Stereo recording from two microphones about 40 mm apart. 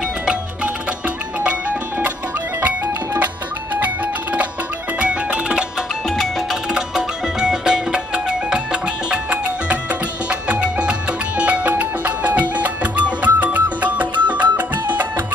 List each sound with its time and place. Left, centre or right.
1.0 s music: right
3.8 s music: right
6.0 s music: centre
6.5 s music: centre
10.5 s music: right